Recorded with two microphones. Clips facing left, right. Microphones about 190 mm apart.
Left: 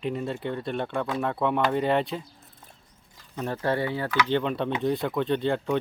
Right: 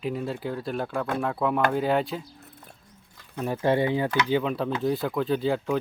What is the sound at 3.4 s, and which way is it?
Speech, 10° right (ahead or behind).